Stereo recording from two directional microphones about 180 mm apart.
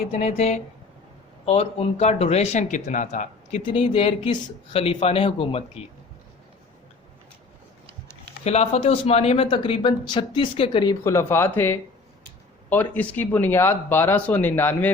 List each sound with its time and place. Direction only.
0.1 s speech: 35° left (ahead or behind)
3.7 s speech: 30° left (ahead or behind)
8.4 s speech: 35° left (ahead or behind)
11.0 s speech: 15° left (ahead or behind)